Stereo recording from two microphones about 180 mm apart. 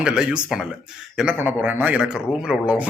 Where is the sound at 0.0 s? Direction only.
5° right (ahead or behind).